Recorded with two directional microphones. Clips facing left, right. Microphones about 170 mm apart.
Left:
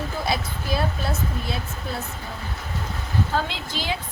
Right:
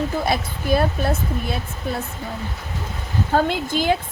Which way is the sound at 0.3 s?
55° right (ahead or behind).